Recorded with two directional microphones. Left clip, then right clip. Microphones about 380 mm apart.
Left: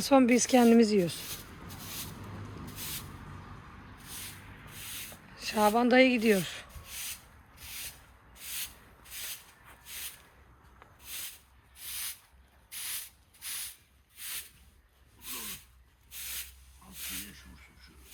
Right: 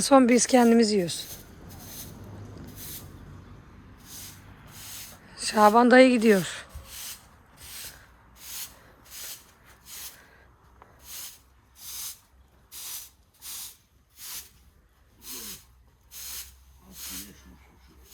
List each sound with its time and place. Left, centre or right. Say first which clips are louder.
0.0 s speech: right 5 dB; centre
2.6 s spray: left 6 dB; left
4.0 s rub: even; centre
5.3 s a woman's voice: right 8 dB; centre
6.7 s rub: even; right
10.8 s a sound: even; right
11.8 s hiss: right 1 dB; centre
12.7 s spray: even; centre
13.4 s a sound: even; centre
15.2 s snort: right 1 dB; right
16.1 s spray: right 1 dB; right
16.9 s a sound: right 1 dB; right